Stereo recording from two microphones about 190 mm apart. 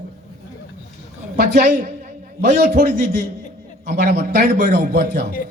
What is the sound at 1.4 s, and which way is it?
A man's voice, 55° right (ahead or behind).